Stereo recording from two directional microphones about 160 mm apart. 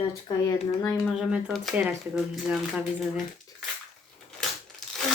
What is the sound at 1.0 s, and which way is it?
Speech, centre (ahead or behind).